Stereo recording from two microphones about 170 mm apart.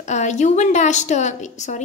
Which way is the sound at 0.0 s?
45° left (ahead or behind).